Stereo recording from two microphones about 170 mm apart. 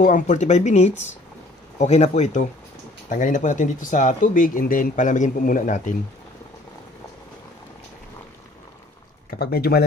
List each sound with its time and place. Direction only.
0.0 s speech: 45° left (ahead or behind)
9.3 s speech: 65° left (ahead or behind)